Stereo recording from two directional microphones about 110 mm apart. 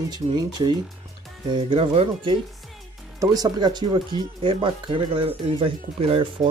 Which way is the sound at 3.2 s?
35° right (ahead or behind).